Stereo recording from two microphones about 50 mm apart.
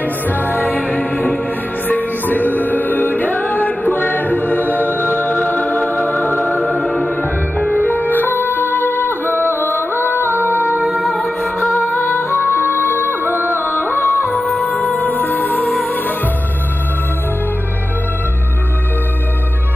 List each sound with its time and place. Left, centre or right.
0.3 s music: left
6.4 s music: centre
7.2 s music: left
10.5 s music: right
10.9 s music: centre
11.9 s music: left
13.2 s music: right
13.7 s music: left
14.3 s music: centre
14.7 s music: left